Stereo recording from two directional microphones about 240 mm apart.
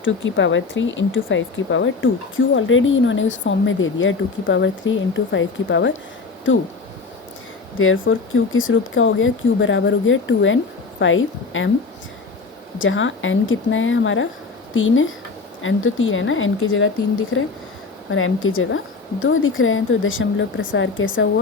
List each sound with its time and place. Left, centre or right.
0.0 s speech: left
7.8 s speech: left
12.8 s a woman's voice: left